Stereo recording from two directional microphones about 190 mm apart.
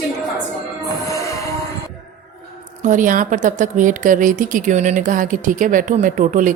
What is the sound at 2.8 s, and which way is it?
Speech, 45° right (ahead or behind).